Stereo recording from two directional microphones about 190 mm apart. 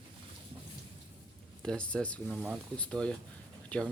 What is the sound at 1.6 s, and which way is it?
Speech, 5° left (ahead or behind).